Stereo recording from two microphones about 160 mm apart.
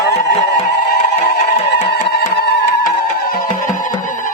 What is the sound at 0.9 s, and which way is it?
Music, 80° left.